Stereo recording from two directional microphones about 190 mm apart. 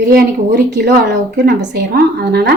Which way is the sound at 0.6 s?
65° right (ahead or behind).